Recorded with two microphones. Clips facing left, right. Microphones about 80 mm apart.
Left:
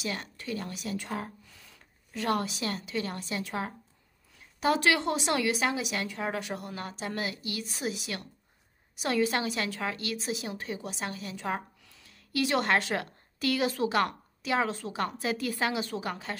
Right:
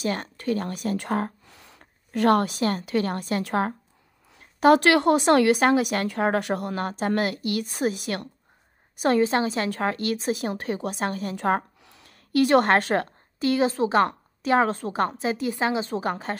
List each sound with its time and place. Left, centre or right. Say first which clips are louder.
0.0 s a woman's voice: right 8 dB; right
9.7 s a woman's voice: right 8 dB; right
13.4 s a woman's voice: right 6 dB; right
15.1 s a woman's voice: right 5 dB; right